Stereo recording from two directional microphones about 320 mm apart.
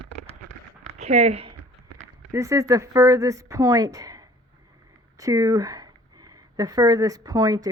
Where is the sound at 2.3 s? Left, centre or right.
Centre.